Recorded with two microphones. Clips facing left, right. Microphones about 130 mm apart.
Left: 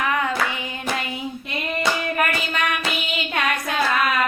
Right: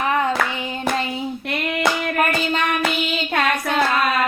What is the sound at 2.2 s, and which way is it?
Child singing, 30° right (ahead or behind).